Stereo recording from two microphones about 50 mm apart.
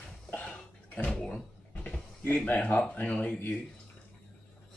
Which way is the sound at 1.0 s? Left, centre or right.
Centre.